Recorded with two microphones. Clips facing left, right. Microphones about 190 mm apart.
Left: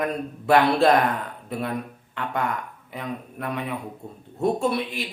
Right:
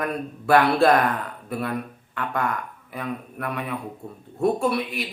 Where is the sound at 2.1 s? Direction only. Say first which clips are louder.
Right 1 dB; 20° left (ahead or behind).